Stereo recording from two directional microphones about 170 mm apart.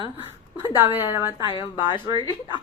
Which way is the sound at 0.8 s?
10° right (ahead or behind).